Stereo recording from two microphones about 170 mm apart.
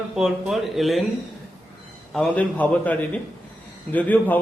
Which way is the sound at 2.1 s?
10° left (ahead or behind).